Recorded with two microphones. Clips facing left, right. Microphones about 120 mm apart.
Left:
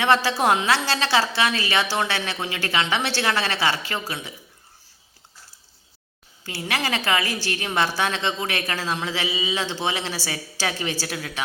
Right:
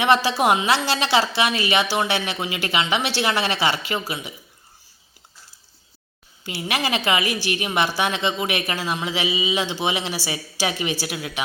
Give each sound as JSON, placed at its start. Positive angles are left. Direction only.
{"t": 0.0, "sound": "a man's voice", "side_deg": -15}
{"t": 6.4, "sound": "a man's voice", "side_deg": -20}